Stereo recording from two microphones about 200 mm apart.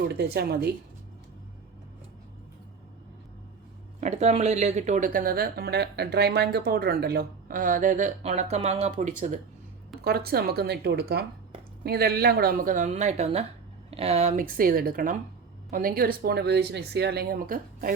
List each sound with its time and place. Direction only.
0.1 s speech: 50° right (ahead or behind)
4.0 s speech: 35° right (ahead or behind)
10.0 s speech: 50° right (ahead or behind)